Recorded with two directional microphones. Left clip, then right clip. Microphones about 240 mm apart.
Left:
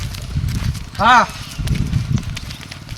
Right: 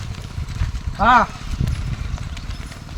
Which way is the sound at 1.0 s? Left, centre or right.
Left.